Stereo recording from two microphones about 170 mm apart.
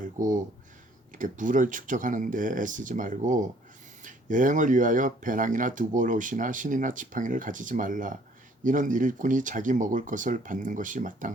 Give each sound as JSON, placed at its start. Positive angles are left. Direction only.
{"t": 0.0, "sound": "speech", "side_deg": -50}